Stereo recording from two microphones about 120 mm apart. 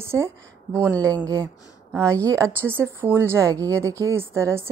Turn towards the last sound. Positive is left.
turn(degrees=-20)  # may be behind; listen again after turning